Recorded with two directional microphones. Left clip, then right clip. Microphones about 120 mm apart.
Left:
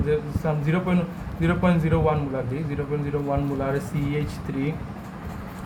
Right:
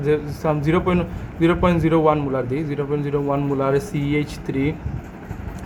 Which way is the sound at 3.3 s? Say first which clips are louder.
Right 6 dB; 15° right (ahead or behind).